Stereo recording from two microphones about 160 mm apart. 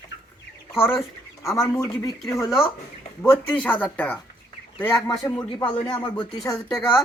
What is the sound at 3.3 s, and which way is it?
Speech, 15° left (ahead or behind).